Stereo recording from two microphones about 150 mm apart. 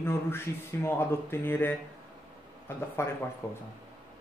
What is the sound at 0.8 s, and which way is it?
Speech, 15° left (ahead or behind).